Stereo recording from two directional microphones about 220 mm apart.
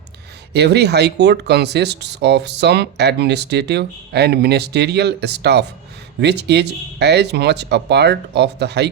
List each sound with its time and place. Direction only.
0.5 s speech: 50° right (ahead or behind)